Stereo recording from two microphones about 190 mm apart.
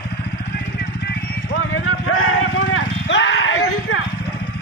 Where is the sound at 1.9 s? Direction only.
90° left.